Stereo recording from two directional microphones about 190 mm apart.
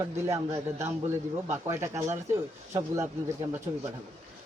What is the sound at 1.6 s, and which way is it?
Speech, 15° right (ahead or behind).